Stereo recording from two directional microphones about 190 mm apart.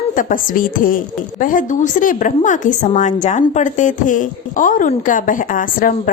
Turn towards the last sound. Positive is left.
turn(degrees=45)  # may be behind; listen again after turning